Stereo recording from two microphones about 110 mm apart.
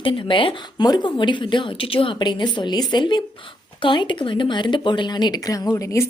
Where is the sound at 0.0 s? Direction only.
50° left (ahead or behind).